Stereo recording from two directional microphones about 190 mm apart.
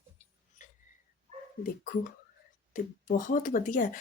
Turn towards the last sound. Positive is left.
turn(degrees=45)  # may be behind; listen again after turning